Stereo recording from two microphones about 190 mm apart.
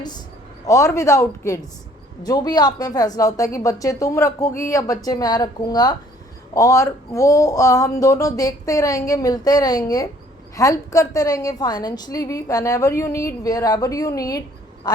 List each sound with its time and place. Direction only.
0.7 s a woman's voice: 15° left (ahead or behind)